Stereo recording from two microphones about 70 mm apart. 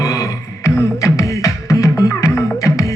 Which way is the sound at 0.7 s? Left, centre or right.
Left.